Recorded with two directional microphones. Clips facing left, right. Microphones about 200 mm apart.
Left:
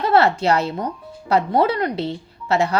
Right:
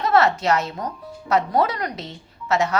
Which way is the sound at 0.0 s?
30° left (ahead or behind).